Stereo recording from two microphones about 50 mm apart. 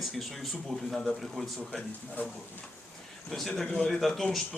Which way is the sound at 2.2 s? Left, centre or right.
Left.